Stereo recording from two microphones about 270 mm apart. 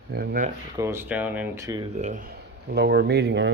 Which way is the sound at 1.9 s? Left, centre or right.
Right.